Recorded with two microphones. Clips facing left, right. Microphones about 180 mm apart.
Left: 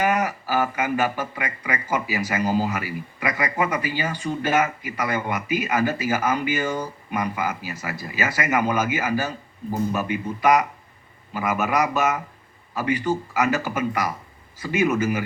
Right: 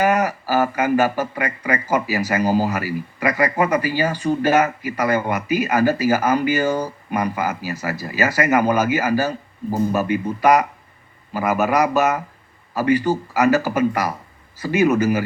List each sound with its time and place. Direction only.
0.0 s speech: 40° right (ahead or behind)